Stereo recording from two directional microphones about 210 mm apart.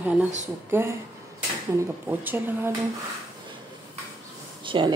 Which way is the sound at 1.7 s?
10° right (ahead or behind).